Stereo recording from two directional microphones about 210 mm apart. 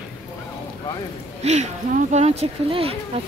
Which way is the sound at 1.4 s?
30° right (ahead or behind).